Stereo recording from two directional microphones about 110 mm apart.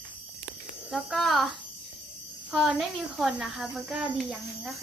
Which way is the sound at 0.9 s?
Centre (ahead or behind).